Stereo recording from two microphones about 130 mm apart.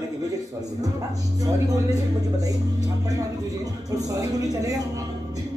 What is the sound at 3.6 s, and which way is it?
Speech, 25° right (ahead or behind).